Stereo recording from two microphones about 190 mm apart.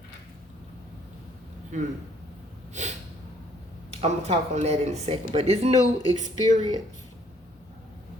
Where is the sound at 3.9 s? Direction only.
35° right (ahead or behind).